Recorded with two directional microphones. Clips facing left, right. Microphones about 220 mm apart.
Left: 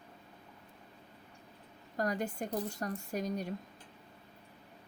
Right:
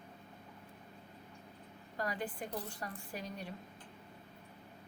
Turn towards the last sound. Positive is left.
turn(degrees=40)  # may be behind; listen again after turning